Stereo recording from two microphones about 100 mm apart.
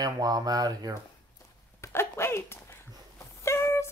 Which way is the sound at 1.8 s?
25° left (ahead or behind).